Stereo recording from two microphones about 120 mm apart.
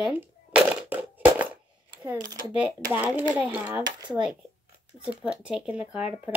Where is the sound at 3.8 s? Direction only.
35° right (ahead or behind).